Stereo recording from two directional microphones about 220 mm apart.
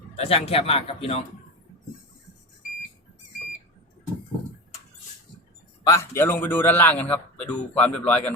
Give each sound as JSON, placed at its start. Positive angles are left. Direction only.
{"t": 0.2, "sound": "speech", "side_deg": 25}
{"t": 5.9, "sound": "a man's voice", "side_deg": 10}